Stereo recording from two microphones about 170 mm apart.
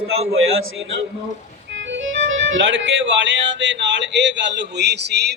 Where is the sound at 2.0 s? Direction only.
90° right.